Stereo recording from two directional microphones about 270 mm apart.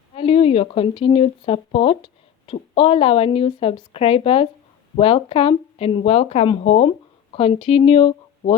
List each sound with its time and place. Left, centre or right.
0.1 s a woman's voice: left